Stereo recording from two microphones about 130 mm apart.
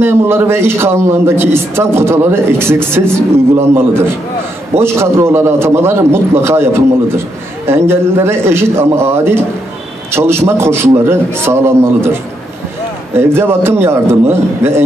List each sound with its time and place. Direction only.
0.0 s a man's voice: 20° right (ahead or behind)